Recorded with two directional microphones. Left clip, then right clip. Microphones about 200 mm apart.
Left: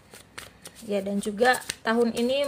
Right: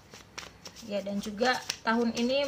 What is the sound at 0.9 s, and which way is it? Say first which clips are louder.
A woman's voice: left 6 dB; 45° left (ahead or behind).